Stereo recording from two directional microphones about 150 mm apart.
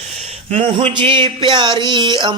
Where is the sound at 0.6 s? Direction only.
35° right (ahead or behind).